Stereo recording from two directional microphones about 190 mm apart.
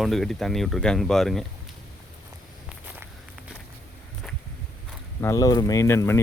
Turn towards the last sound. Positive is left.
turn(degrees=15)  # may be behind; listen again after turning